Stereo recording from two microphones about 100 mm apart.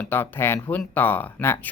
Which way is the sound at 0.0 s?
20° left (ahead or behind).